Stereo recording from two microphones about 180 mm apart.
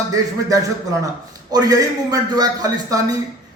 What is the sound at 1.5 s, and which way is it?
A man's voice, 20° right (ahead or behind).